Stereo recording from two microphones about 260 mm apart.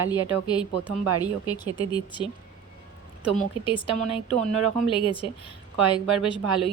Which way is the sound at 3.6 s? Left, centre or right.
Centre.